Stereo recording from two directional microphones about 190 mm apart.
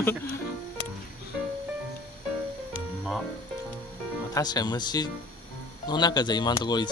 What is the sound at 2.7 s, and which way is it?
Music, 5° right (ahead or behind).